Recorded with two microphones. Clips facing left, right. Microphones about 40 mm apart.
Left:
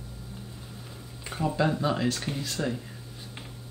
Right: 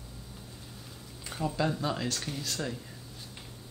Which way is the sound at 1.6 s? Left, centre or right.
Centre.